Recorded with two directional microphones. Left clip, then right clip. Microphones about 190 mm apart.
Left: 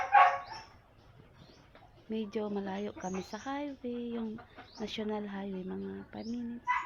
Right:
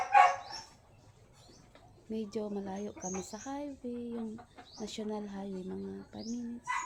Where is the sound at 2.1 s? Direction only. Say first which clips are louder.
Left 2 dB; centre (ahead or behind).